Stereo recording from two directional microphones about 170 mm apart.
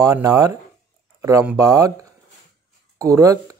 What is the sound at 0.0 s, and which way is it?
Speech, 20° right (ahead or behind).